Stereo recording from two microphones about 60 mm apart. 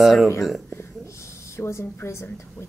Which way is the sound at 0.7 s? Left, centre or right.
Left.